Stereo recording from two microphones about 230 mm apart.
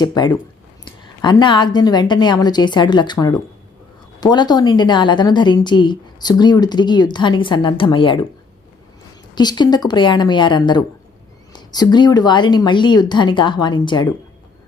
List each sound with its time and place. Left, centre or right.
0.0 s a woman's voice: centre
9.3 s a woman's voice: centre